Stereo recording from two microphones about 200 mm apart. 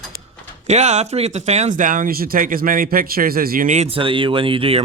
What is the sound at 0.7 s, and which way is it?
Speech, 35° right (ahead or behind).